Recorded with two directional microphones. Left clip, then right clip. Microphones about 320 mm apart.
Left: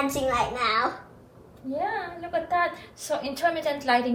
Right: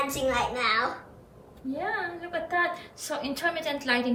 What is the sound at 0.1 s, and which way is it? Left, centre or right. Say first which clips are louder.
Speech: left 2 dB; centre.